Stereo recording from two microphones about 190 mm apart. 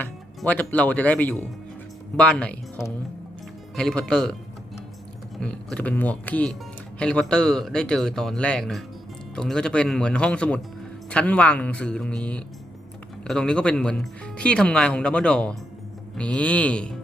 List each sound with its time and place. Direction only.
0.0 s speech: 10° left (ahead or behind)
5.4 s speech: 5° left (ahead or behind)